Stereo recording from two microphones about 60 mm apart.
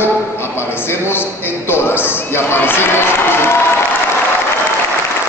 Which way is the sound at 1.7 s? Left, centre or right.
Left.